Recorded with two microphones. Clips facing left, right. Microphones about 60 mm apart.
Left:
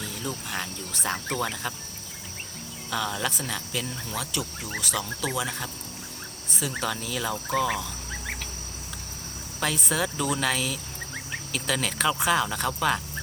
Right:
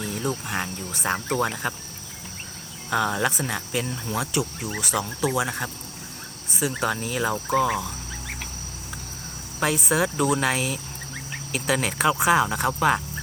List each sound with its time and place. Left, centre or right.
0.0 s speech: right
2.9 s speech: right
3.2 s speech: right
5.5 s speech: right
6.6 s speech: centre
6.8 s speech: right
9.6 s speech: centre